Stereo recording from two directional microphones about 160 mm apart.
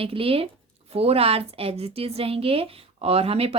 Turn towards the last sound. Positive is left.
turn(degrees=-40)  # may be behind; listen again after turning